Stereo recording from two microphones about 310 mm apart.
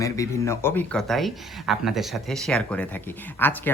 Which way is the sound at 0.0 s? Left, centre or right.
Centre.